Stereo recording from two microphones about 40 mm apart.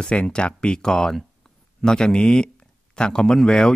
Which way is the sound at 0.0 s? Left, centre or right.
Left.